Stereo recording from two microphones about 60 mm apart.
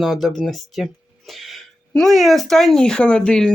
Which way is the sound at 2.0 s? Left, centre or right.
Centre.